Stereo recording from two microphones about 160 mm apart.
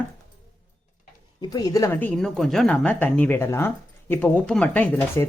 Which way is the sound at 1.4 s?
25° left (ahead or behind).